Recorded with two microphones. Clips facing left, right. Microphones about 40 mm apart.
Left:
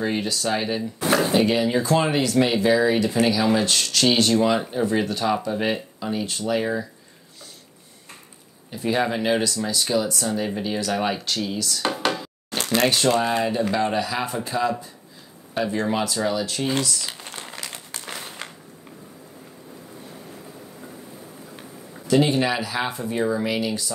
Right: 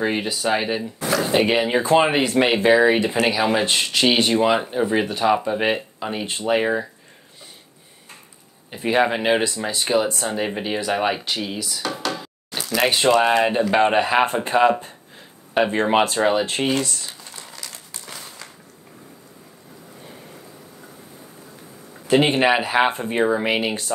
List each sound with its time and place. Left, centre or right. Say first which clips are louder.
0.0 s speech: right 2 dB; right
0.9 s a sound: left 3 dB; left
1.3 s speech: right 1 dB; right
8.6 s speech: right 4 dB; right
11.8 s speech: left 3 dB; left
12.8 s speech: right 3 dB; right
13.1 s speech: right 5 dB; right
17.0 s a sound: left 3 dB; left
22.0 s speech: right 3 dB; right